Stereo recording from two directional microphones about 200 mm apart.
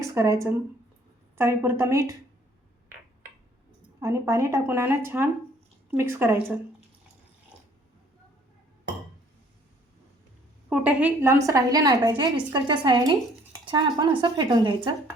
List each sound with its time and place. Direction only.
0.0 s speech: 15° right (ahead or behind)
4.0 s speech: 15° right (ahead or behind)
10.7 s a woman's voice: 5° right (ahead or behind); by 14.8 s 25° right (ahead or behind)